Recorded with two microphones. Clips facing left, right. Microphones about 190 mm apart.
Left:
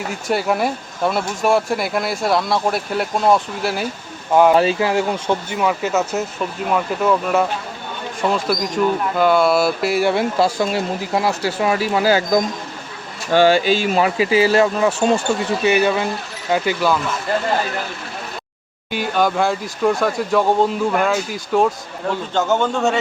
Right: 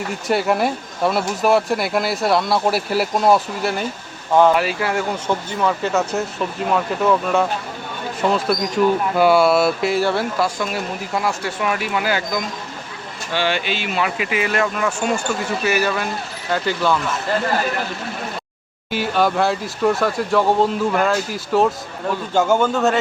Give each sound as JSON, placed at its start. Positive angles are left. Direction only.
{"t": 0.1, "sound": "speech", "side_deg": 0}
{"t": 4.5, "sound": "speech", "side_deg": 25}
{"t": 10.0, "sound": "speech", "side_deg": 15}
{"t": 10.3, "sound": "speech", "side_deg": 25}
{"t": 18.9, "sound": "a man's voice", "side_deg": 0}